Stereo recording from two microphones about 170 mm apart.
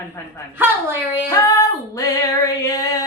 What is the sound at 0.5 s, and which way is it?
Speech, 15° right (ahead or behind).